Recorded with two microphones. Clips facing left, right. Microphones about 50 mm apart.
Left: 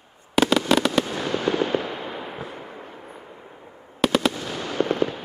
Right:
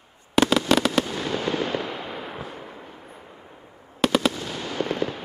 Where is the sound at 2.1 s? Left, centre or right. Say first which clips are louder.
Left 1 dB; centre.